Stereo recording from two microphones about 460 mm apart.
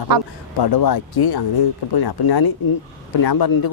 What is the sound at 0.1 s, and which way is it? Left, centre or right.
Speech, right.